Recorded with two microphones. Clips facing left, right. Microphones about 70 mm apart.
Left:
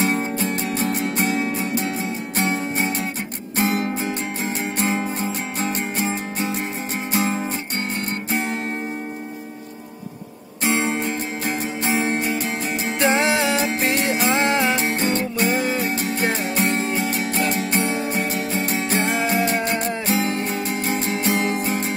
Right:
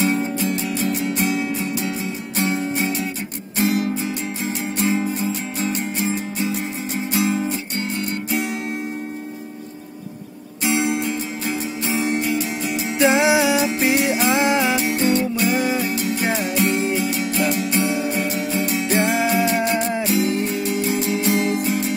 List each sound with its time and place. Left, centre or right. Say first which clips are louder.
0.0 s music: right 1 dB; left
10.6 s music: right 1 dB; left
13.1 s music: right 3 dB; centre
13.6 s music: right 2 dB; left
15.5 s music: right 2 dB; centre
15.8 s music: even; left